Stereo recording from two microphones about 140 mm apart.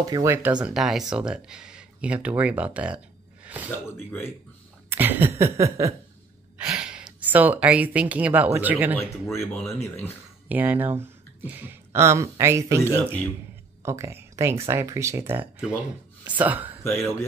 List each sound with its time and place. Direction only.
0.0 s speech: 25° right (ahead or behind)
0.7 s speech: centre (ahead or behind)
3.4 s gasp: 10° right (ahead or behind)
3.9 s speech: 15° left (ahead or behind)
4.8 s cough: 15° right (ahead or behind)
5.4 s speech: 20° right (ahead or behind)
6.6 s speech: 5° right (ahead or behind)
8.9 s speech: 10° left (ahead or behind)
10.5 s speech: 10° right (ahead or behind)
13.8 s speech: 20° right (ahead or behind)
16.8 s speech: 15° left (ahead or behind)